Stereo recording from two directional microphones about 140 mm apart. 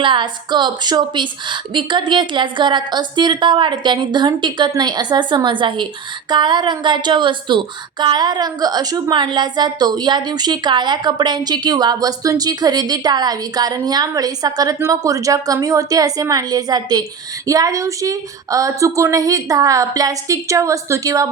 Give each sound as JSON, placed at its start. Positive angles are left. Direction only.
{"t": 0.0, "sound": "a woman's voice", "side_deg": -35}